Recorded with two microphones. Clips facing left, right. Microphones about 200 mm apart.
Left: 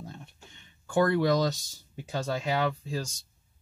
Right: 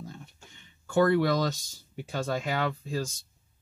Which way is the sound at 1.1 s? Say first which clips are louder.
Even; 20° left (ahead or behind).